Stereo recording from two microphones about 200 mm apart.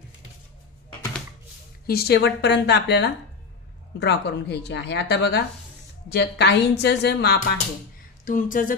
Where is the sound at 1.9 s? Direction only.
50° left (ahead or behind).